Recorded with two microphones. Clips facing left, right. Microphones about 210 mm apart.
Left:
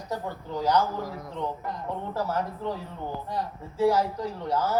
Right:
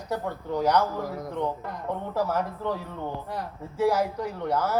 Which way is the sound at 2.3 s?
60° right (ahead or behind).